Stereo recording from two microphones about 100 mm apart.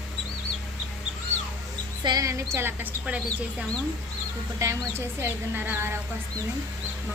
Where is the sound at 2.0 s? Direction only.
45° right (ahead or behind).